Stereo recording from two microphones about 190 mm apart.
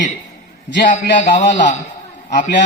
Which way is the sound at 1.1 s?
40° left (ahead or behind).